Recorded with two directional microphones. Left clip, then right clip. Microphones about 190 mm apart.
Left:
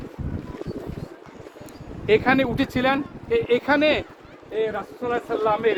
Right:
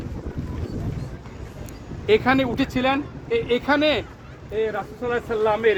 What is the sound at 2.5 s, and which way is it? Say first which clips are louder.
Speech: even; 35° right (ahead or behind).